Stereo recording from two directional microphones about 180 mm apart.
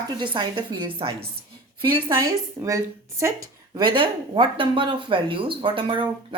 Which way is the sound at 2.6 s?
15° right (ahead or behind).